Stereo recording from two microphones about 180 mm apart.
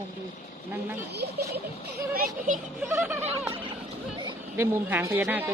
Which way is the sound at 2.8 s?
15° right (ahead or behind).